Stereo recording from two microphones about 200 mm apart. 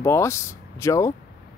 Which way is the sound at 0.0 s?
15° left (ahead or behind).